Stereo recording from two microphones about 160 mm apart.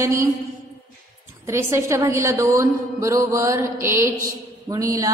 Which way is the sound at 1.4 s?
15° right (ahead or behind).